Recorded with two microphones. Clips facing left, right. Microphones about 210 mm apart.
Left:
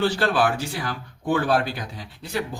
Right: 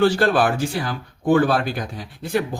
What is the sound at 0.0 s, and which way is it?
Speech, 50° right (ahead or behind).